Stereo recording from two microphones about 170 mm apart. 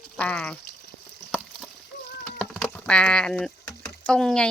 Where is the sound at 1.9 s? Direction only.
70° left (ahead or behind).